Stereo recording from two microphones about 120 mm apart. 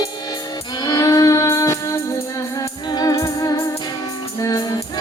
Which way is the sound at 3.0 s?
30° left (ahead or behind).